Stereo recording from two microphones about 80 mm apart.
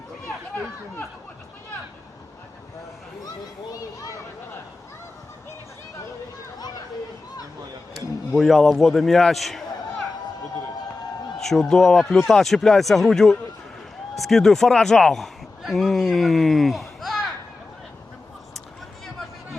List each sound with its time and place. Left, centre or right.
3.7 s children playing: left
8.4 s speech: centre
11.3 s speech: centre